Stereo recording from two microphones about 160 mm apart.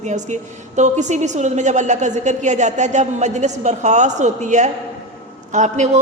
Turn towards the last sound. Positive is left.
turn(degrees=-50)  # may be behind; listen again after turning